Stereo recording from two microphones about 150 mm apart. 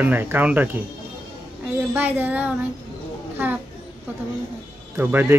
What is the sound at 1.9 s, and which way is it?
Speech, 10° right (ahead or behind).